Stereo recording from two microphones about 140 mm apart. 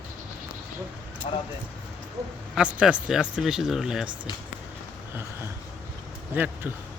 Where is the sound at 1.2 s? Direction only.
50° left (ahead or behind).